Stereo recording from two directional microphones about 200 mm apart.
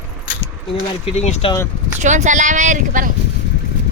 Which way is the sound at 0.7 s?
30° left (ahead or behind).